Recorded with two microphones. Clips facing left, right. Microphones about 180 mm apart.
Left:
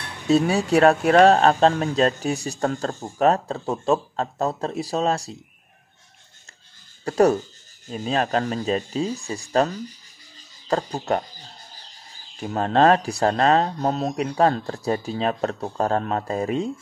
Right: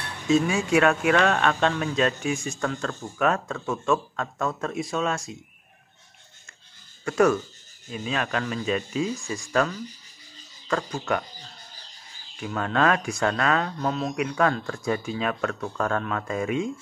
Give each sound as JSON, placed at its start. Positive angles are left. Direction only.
{"t": 0.3, "sound": "speech", "side_deg": 35}
{"t": 7.1, "sound": "speech", "side_deg": 35}
{"t": 12.4, "sound": "speech", "side_deg": 35}